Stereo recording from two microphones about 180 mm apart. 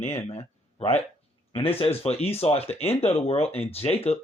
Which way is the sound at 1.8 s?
35° left (ahead or behind).